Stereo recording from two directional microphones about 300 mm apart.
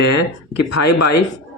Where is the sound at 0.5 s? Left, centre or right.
Left.